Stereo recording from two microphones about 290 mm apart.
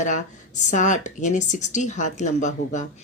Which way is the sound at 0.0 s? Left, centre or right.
Left.